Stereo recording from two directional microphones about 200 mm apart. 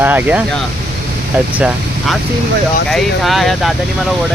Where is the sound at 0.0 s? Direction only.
10° right (ahead or behind).